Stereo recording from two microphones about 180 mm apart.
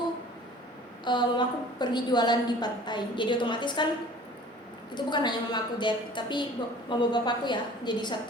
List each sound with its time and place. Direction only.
1.0 s a woman's voice: 25° left (ahead or behind)
4.9 s a woman's voice: 25° left (ahead or behind)